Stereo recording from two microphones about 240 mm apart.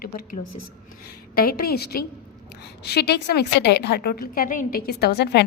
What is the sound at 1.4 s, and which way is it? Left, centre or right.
A woman's voice, left.